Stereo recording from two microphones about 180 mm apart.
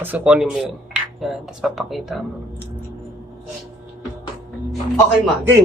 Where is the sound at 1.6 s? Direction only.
Centre (ahead or behind).